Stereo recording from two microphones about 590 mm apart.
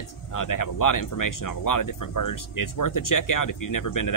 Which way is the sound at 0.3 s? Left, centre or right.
Left.